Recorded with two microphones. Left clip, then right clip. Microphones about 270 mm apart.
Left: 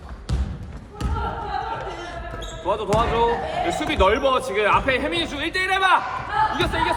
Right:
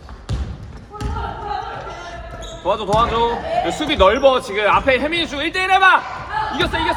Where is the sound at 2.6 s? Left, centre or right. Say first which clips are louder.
Right 4 dB; right.